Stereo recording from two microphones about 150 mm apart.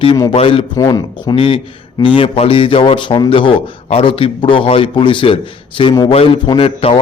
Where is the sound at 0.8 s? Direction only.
25° left (ahead or behind).